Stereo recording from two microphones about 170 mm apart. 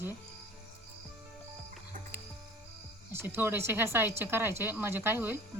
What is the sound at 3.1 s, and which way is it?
Speech, 15° right (ahead or behind).